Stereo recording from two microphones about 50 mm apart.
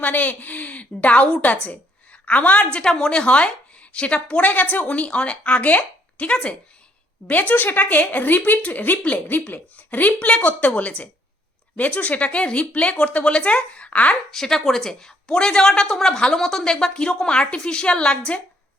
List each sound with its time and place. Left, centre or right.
0.0 s a woman's voice: left
2.7 s a woman's voice: centre
14.3 s speech: centre